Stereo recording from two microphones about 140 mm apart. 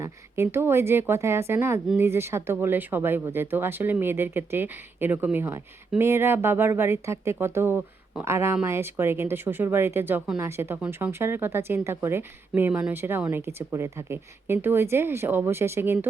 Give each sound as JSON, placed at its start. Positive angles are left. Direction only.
{"t": 0.0, "sound": "speech", "side_deg": -20}